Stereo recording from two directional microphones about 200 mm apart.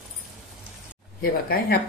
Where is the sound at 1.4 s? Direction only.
50° left (ahead or behind).